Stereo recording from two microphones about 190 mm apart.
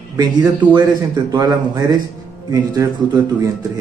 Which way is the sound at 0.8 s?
20° right (ahead or behind).